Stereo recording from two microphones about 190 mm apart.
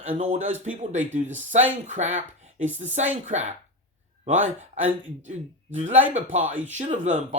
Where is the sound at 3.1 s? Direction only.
40° right (ahead or behind).